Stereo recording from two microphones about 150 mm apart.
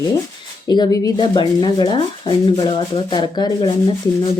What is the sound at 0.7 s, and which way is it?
Speech, 25° left (ahead or behind).